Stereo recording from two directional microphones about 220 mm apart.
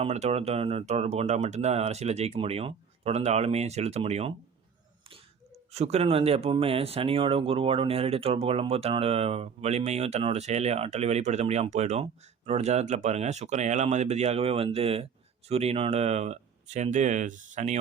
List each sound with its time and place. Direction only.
0.0 s speech: 30° right (ahead or behind)
5.7 s speech: 30° right (ahead or behind)